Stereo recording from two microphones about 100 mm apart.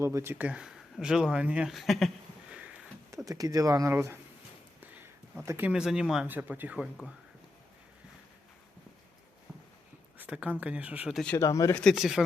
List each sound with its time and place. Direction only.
0.0 s speech: 30° right (ahead or behind)
0.4 s speech: 10° right (ahead or behind)
3.1 s speech: 35° right (ahead or behind)
5.5 s speech: 20° right (ahead or behind)
5.7 s speech: 5° right (ahead or behind)
6.2 s speech: 20° right (ahead or behind)
10.2 s speech: 15° right (ahead or behind)
11.3 s speech: 30° left (ahead or behind)
11.9 s speech: 5° right (ahead or behind)